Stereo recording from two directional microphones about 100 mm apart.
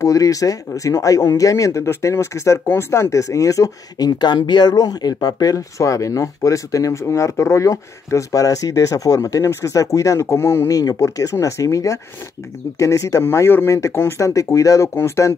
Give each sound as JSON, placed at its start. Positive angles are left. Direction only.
{"t": 0.0, "sound": "speech", "side_deg": 35}
{"t": 10.8, "sound": "speech", "side_deg": 40}